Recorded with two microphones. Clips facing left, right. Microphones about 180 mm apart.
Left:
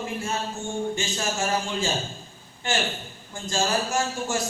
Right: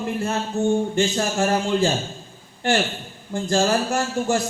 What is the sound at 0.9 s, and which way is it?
Speech, 60° right (ahead or behind).